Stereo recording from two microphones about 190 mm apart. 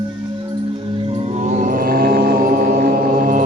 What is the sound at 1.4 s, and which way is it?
Mantra, 45° right (ahead or behind).